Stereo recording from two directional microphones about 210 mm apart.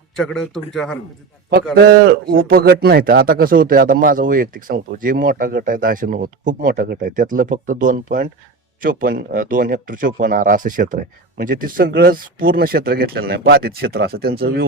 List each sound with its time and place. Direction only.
0.2 s speech: centre (ahead or behind)
1.7 s a man's voice: 50° right (ahead or behind)